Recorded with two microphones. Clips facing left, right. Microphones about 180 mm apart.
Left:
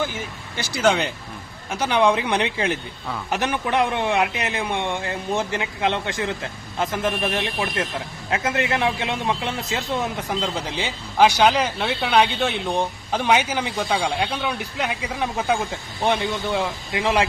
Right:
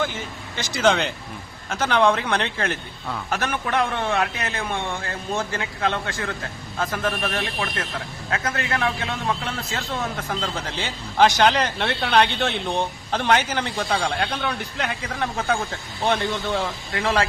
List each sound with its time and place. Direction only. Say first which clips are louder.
0.0 s a man's voice: even; 10° left (ahead or behind)